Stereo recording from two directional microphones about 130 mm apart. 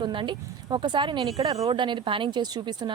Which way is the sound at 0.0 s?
40° right (ahead or behind).